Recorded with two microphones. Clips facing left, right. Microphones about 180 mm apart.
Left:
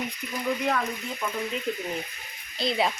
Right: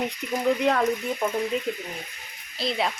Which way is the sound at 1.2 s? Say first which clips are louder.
Right 5 dB; 50° right (ahead or behind).